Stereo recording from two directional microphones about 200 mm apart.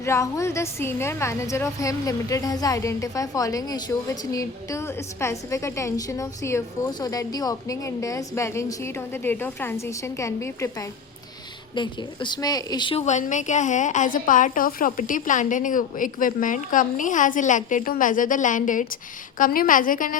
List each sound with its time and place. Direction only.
0.0 s a woman's voice: 15° left (ahead or behind); by 20.1 s 45° left (ahead or behind)